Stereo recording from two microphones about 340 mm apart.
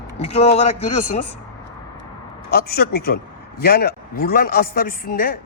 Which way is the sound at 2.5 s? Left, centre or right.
Left.